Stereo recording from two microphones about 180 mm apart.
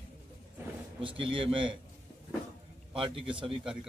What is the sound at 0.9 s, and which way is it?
Speech, 30° right (ahead or behind).